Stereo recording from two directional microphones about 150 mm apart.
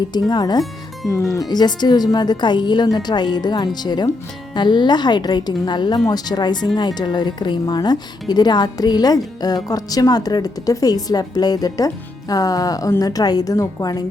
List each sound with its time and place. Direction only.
0.1 s speech: 25° left (ahead or behind)